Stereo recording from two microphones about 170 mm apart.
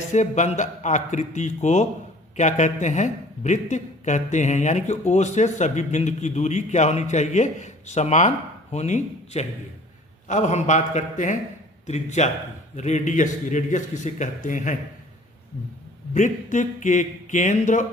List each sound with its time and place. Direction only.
0.1 s a man's voice: 45° left (ahead or behind)
16.1 s speech: 45° left (ahead or behind)